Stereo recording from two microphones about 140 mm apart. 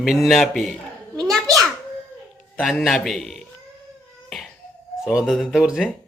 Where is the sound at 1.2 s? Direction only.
5° left (ahead or behind).